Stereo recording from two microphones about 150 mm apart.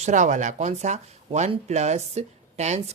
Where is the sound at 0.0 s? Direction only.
55° right (ahead or behind).